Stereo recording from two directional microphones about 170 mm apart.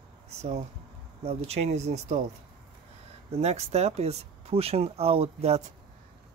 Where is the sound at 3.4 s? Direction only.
40° right (ahead or behind).